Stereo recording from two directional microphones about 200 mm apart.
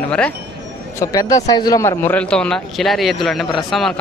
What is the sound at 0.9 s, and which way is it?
A man's voice, 15° left (ahead or behind).